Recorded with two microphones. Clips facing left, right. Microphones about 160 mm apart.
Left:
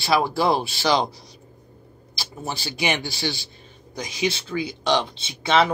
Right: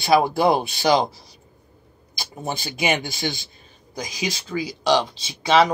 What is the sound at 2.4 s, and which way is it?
Speech, 20° right (ahead or behind).